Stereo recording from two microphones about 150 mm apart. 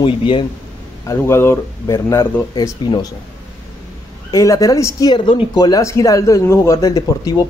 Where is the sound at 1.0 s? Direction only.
15° left (ahead or behind).